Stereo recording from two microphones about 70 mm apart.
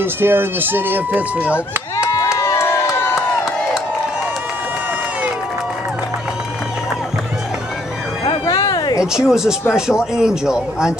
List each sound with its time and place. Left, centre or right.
0.0 s speech: right
2.1 s crowd: left
8.5 s a sound: left
9.1 s a man's voice: centre